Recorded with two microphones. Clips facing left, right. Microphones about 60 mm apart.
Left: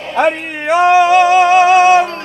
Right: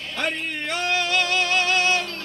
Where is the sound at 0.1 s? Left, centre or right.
Left.